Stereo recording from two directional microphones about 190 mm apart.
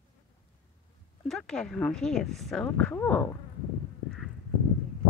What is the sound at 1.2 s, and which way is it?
Speech, 5° left (ahead or behind).